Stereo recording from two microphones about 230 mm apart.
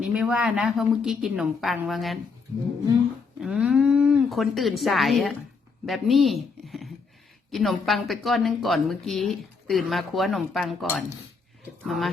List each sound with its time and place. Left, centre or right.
0.0 s a woman's voice: centre
3.4 s a woman's voice: centre